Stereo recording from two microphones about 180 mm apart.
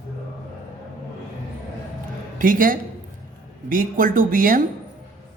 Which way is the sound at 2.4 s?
50° right (ahead or behind).